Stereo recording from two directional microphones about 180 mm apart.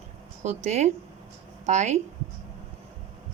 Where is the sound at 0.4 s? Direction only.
40° right (ahead or behind).